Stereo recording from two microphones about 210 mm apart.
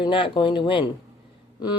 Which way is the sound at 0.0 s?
25° left (ahead or behind).